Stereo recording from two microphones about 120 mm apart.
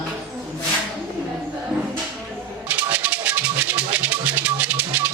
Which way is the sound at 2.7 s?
15° right (ahead or behind).